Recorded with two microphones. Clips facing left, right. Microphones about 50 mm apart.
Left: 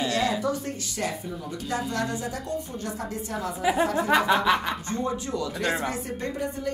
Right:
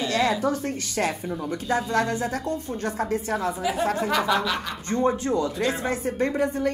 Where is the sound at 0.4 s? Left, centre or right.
Right.